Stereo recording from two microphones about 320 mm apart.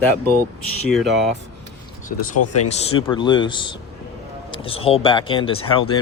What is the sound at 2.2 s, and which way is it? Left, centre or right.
Speech, left.